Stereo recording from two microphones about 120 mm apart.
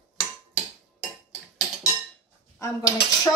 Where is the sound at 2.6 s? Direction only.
30° left (ahead or behind).